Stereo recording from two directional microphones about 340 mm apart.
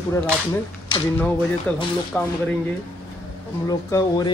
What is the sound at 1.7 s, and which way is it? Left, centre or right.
Speech, centre.